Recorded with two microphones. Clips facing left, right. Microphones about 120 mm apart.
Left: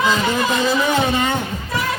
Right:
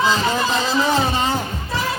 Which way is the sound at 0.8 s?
30° right (ahead or behind).